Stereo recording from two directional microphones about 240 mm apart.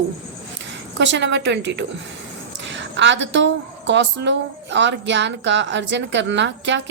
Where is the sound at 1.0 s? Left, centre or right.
Right.